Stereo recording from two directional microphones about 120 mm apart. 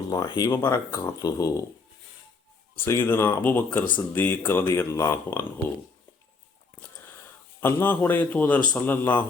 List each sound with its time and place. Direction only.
0.1 s speech: 35° left (ahead or behind)
2.7 s a man's voice: 20° left (ahead or behind)
7.6 s a man's voice: 15° left (ahead or behind)